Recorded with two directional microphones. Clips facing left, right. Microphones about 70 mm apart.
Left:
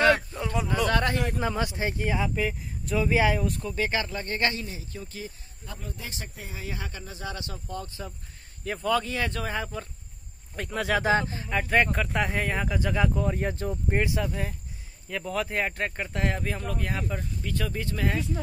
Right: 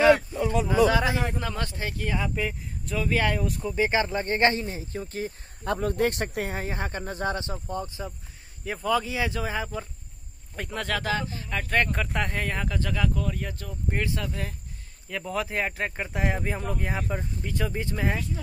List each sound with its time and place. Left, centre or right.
0.7 s speech: centre
1.4 s speech: centre
2.1 s speech: centre
3.1 s speech: centre
3.3 s speech: centre
3.6 s speech: centre; by 5.3 s right
5.6 s speech: right
6.6 s speech: right
7.3 s speech: right
8.6 s speech: centre
10.9 s speech: left
11.4 s speech: centre
15.0 s speech: centre; by 18.2 s right